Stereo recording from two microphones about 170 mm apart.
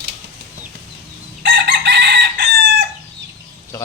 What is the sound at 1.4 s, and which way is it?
Chicken, 90° right.